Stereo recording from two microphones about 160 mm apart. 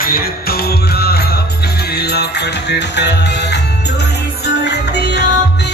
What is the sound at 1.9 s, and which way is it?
Music, 90° left.